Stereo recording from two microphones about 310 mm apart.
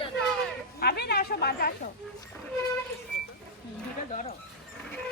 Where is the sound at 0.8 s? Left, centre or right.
Left.